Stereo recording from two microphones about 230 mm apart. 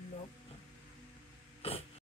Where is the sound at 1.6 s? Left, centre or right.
Left.